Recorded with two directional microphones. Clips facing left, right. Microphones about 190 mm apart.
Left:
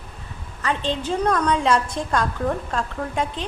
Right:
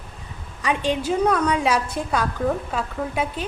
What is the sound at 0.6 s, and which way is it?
A woman's voice, 10° right (ahead or behind).